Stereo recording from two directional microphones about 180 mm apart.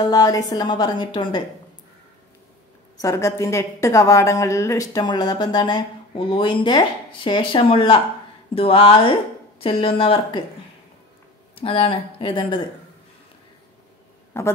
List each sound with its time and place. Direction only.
0.0 s a woman's voice: 20° left (ahead or behind)
3.0 s a woman's voice: 15° left (ahead or behind)
11.5 s a woman's voice: 30° left (ahead or behind)
14.3 s a woman's voice: 15° left (ahead or behind)